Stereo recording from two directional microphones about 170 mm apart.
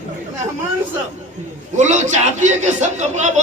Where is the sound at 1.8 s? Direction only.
45° right (ahead or behind).